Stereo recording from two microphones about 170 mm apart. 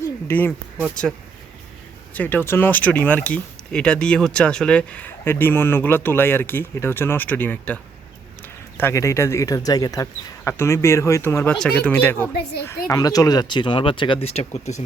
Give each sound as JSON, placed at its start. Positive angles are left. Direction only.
{"t": 0.3, "sound": "speech", "side_deg": 10}
{"t": 2.1, "sound": "speech", "side_deg": 10}
{"t": 8.8, "sound": "speech", "side_deg": 15}
{"t": 12.9, "sound": "speech", "side_deg": 20}